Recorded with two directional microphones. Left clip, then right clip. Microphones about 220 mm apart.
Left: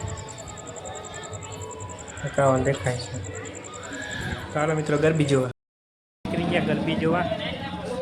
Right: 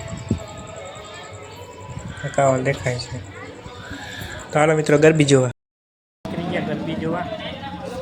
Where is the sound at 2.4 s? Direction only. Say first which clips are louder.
Right 3 dB; 15° right (ahead or behind).